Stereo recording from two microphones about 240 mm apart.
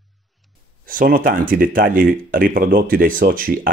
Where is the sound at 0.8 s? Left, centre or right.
Right.